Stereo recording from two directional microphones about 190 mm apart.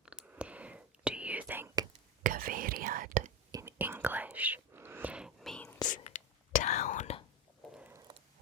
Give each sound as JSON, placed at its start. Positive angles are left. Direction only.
{"t": 0.0, "sound": "whispering", "side_deg": -5}
{"t": 2.2, "sound": "whispering", "side_deg": -45}
{"t": 3.5, "sound": "whispering", "side_deg": -15}
{"t": 5.9, "sound": "whispering", "side_deg": 40}
{"t": 7.8, "sound": "a sound", "side_deg": -10}